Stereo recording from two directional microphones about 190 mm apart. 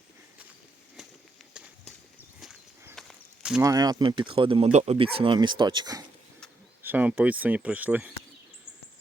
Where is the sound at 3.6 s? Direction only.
20° right (ahead or behind).